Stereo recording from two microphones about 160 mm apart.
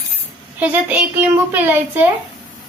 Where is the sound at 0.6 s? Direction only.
10° right (ahead or behind).